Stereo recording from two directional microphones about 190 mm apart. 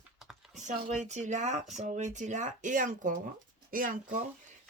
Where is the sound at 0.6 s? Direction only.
40° right (ahead or behind).